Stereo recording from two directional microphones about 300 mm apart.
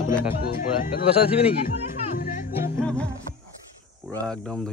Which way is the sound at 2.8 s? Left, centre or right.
Centre.